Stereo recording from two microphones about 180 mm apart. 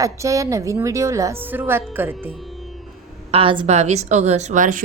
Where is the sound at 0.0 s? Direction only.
20° right (ahead or behind).